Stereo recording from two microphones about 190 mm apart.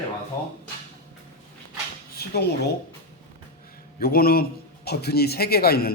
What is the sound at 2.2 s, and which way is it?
Speech, 55° left (ahead or behind).